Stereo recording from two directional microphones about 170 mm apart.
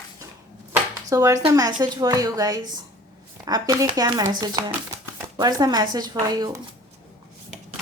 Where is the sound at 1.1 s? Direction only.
20° right (ahead or behind).